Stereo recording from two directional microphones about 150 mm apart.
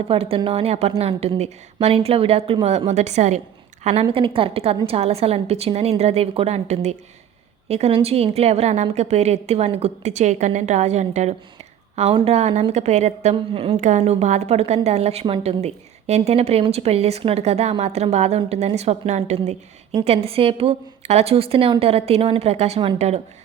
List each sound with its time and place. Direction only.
0.1 s a woman's voice: 40° right (ahead or behind)
4.0 s a woman's voice: 35° right (ahead or behind)
13.3 s a woman's voice: 40° right (ahead or behind)
13.7 s a woman's voice: 55° right (ahead or behind)